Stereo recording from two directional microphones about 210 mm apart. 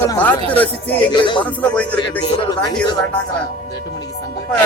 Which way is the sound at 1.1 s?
20° left (ahead or behind).